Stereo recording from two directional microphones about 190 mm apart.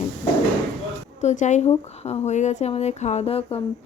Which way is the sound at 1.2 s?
40° left (ahead or behind).